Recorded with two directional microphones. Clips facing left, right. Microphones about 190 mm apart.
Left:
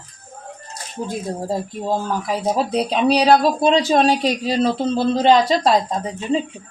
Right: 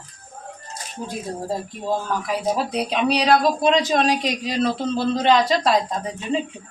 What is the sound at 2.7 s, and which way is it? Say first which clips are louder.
Speech: left 4 dB; 30° left (ahead or behind).